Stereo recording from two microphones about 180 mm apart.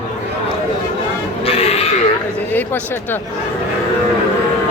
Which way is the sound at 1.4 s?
35° left (ahead or behind).